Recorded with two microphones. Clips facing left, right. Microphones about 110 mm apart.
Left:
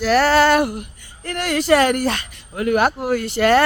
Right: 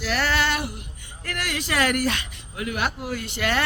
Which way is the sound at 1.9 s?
30° left (ahead or behind).